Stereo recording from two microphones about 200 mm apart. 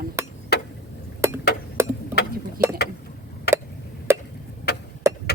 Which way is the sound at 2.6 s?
45° right (ahead or behind).